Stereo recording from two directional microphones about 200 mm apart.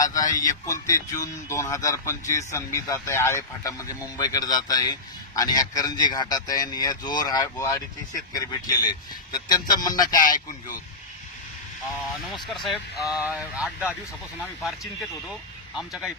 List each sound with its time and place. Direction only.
0.0 s a man's voice: 15° left (ahead or behind)
10.2 s speech: 45° left (ahead or behind)
12.1 s speech: centre (ahead or behind)
15.7 s speech: centre (ahead or behind)